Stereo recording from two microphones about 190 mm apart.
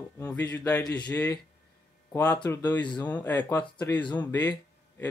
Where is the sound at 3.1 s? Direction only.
10° left (ahead or behind).